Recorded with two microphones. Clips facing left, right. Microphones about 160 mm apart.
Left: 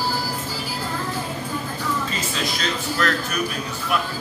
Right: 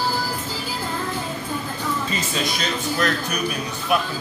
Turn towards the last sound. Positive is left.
turn(degrees=-20)  # may be behind; listen again after turning